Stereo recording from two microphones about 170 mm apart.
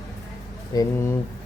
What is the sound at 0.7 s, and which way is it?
Speech, 20° left (ahead or behind).